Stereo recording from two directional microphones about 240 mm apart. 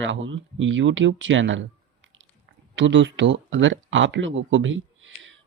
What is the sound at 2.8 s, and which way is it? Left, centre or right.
A child's voice, right.